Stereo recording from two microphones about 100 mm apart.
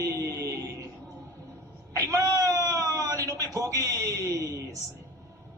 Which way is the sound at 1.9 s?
35° right (ahead or behind).